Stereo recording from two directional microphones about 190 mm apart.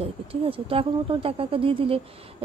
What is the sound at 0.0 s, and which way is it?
Speech, 30° right (ahead or behind).